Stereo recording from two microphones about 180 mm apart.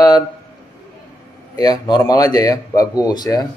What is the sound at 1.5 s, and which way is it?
Speech, 20° left (ahead or behind).